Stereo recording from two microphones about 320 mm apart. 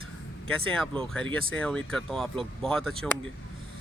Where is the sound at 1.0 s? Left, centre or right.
Centre.